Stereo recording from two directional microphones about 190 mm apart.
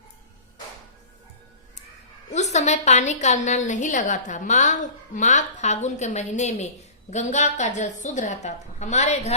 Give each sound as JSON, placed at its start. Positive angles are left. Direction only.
{"t": 2.3, "sound": "a woman's voice", "side_deg": 35}